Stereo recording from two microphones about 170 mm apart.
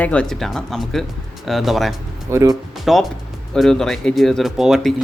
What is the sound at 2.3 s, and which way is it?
Speech, 20° right (ahead or behind).